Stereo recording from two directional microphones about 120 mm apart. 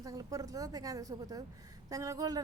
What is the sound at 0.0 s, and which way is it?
A woman's voice, 30° right (ahead or behind).